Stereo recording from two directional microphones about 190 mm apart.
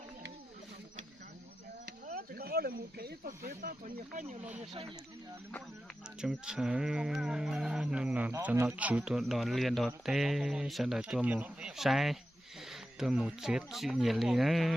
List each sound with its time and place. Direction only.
2.1 s speech: 55° right (ahead or behind)
6.2 s speech: 5° right (ahead or behind)